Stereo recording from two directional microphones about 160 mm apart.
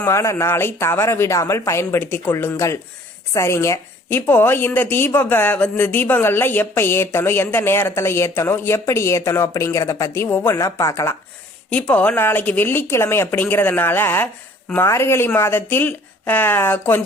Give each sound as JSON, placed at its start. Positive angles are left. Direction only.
{"t": 0.0, "sound": "a woman's voice", "side_deg": 20}
{"t": 11.7, "sound": "a woman's voice", "side_deg": 10}